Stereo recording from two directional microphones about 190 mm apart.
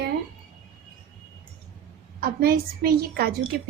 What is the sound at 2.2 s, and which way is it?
A woman's voice, 50° right (ahead or behind).